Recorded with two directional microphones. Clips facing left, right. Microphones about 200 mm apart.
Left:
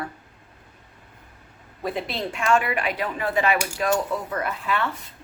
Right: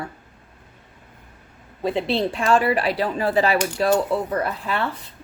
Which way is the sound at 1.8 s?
30° right (ahead or behind).